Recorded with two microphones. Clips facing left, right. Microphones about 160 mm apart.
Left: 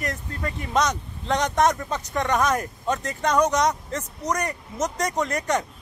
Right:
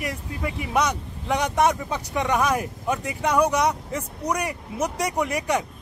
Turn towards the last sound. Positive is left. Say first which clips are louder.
# even
turn(degrees=-10)  # may be behind; listen again after turning